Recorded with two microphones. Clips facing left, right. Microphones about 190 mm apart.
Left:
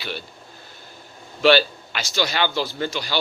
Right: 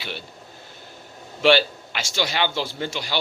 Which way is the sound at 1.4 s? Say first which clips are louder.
Left 1 dB; 20° right (ahead or behind).